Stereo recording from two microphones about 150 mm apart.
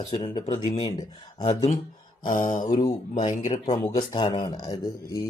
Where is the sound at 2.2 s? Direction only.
60° left (ahead or behind).